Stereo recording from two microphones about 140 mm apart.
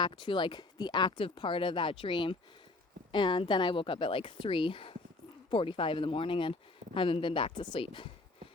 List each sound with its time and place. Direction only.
0.0 s speech: 35° left (ahead or behind)